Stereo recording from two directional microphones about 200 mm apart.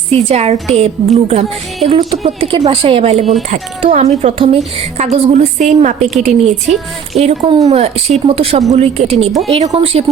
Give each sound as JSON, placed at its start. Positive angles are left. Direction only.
{"t": 0.1, "sound": "a woman's voice", "side_deg": -30}
{"t": 1.9, "sound": "a woman's voice", "side_deg": -20}